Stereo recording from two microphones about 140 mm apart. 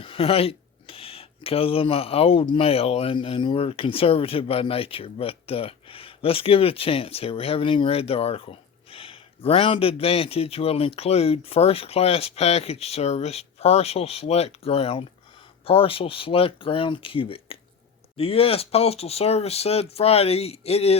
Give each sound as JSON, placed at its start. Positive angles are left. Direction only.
{"t": 0.0, "sound": "speech", "side_deg": 40}